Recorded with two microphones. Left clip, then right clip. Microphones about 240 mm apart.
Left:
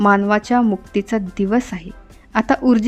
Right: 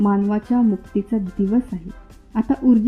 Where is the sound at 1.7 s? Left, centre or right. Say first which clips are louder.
Left 2 dB; left.